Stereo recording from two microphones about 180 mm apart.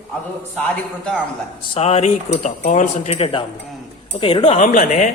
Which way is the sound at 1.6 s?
35° left (ahead or behind).